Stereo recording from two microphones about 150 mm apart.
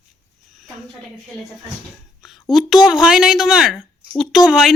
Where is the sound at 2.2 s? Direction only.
Centre (ahead or behind).